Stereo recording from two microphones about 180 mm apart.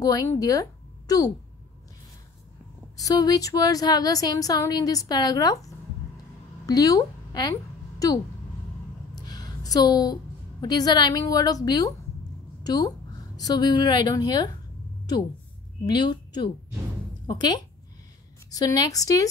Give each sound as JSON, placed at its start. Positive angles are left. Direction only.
{"t": 0.0, "sound": "a woman's voice", "side_deg": 20}
{"t": 3.0, "sound": "a woman's voice", "side_deg": 20}
{"t": 9.1, "sound": "a sound", "side_deg": 20}
{"t": 10.6, "sound": "speech", "side_deg": 20}
{"t": 15.9, "sound": "speech", "side_deg": 25}